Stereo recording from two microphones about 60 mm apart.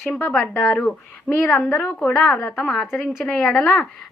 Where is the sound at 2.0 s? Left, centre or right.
Centre.